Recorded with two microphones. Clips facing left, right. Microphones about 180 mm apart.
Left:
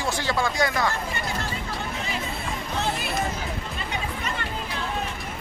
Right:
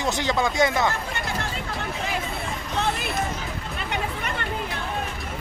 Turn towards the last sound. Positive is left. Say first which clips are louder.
# right 2 dB
turn(degrees=-60)  # may be behind; listen again after turning